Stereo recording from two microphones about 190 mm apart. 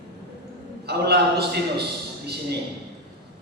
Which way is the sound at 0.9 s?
60° right (ahead or behind).